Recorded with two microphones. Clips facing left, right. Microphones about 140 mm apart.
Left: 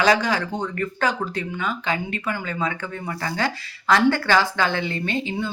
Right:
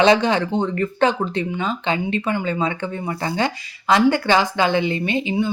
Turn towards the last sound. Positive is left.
turn(degrees=-15)  # may be behind; listen again after turning